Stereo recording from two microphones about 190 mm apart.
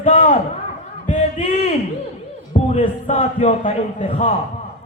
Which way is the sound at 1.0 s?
40° left (ahead or behind).